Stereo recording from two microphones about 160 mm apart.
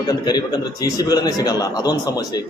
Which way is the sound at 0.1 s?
25° left (ahead or behind).